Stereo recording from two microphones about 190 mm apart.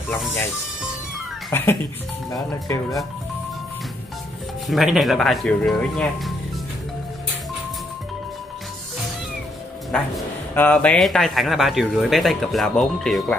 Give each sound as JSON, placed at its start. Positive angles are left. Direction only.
{"t": 1.5, "sound": "speech", "side_deg": 10}
{"t": 4.6, "sound": "speech", "side_deg": 0}
{"t": 9.8, "sound": "speech", "side_deg": 5}